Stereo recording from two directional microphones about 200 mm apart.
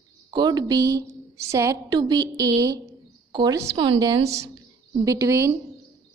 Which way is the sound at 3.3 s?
15° right (ahead or behind).